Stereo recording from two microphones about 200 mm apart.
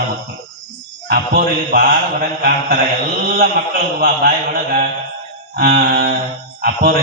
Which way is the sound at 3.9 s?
45° right (ahead or behind).